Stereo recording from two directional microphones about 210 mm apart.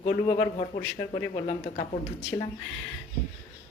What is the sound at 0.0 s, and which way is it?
A woman's voice, 30° left (ahead or behind).